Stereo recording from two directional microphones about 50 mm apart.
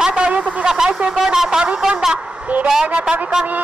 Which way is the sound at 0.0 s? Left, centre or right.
Centre.